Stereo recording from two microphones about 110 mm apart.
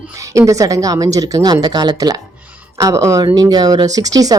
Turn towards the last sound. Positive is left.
turn(degrees=-35)  # may be behind; listen again after turning